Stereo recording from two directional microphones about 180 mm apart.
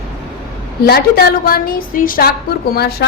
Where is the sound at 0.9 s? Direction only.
60° left (ahead or behind).